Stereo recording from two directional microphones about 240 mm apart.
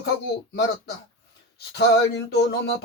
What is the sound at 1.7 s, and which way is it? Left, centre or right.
Speech, left.